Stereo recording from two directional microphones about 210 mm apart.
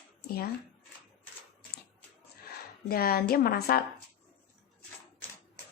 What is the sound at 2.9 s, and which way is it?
Speech, 45° left (ahead or behind).